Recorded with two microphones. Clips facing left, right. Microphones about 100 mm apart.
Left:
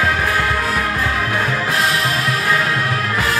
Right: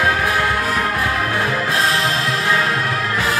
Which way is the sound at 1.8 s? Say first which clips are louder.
Even; 30° right (ahead or behind).